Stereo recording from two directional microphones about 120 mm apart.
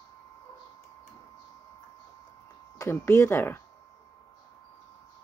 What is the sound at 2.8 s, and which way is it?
Speech, 25° left (ahead or behind).